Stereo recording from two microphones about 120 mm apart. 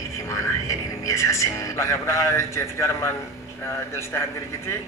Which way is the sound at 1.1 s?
25° left (ahead or behind).